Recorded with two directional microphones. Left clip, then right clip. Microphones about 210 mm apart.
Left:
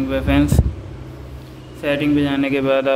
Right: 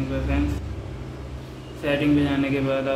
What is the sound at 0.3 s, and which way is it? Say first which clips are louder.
Speech: left 11 dB; 50° left (ahead or behind).